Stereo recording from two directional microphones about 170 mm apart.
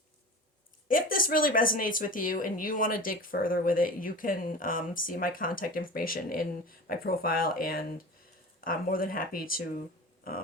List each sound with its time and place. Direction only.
0.9 s speech: 55° left (ahead or behind)